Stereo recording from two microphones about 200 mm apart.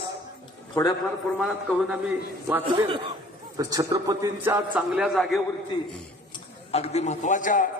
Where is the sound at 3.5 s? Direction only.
20° right (ahead or behind); by 5.4 s centre (ahead or behind).